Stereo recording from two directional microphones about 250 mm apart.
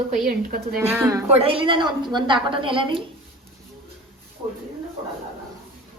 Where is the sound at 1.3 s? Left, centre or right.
Right.